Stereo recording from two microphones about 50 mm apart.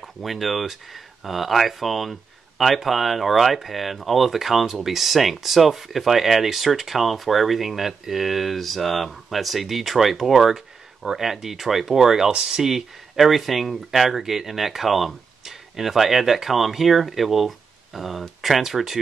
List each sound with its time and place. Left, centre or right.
0.0 s speech: centre